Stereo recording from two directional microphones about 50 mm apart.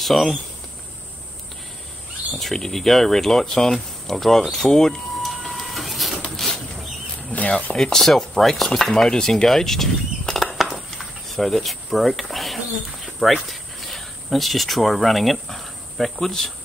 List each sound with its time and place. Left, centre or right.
0.0 s speech: centre
2.3 s speech: centre
6.3 s a sound: centre
7.3 s cricket: left
7.7 s speech: centre
10.7 s cricket: centre
13.2 s speech: centre